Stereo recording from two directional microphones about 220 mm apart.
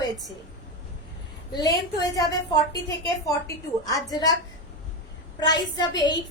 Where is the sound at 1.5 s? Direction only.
15° left (ahead or behind).